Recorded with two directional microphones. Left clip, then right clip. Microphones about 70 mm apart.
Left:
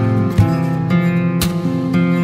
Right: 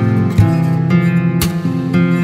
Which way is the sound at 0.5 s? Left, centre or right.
Left.